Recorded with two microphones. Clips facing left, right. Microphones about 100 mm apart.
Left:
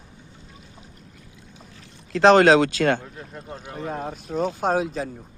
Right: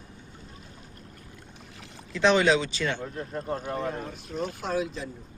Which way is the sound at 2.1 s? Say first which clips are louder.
Left 7 dB; 85° left.